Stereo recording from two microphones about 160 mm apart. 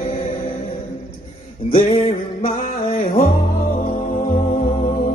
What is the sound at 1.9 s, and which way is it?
Music, 35° left (ahead or behind).